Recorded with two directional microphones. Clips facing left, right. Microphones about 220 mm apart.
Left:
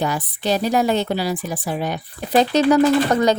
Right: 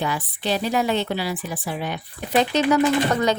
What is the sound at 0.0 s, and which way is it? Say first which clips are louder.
Speech: left 3 dB; 45° left (ahead or behind).